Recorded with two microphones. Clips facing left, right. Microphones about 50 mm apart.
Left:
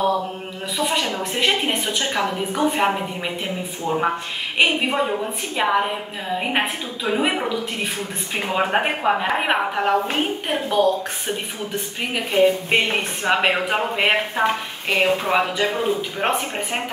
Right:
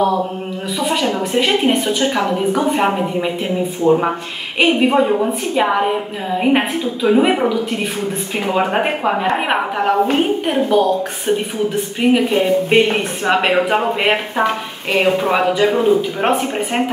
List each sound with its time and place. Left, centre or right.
0.7 s speech: centre
3.8 s a woman's voice: centre
4.6 s speech: centre
8.5 s speech: centre
12.0 s a woman's voice: centre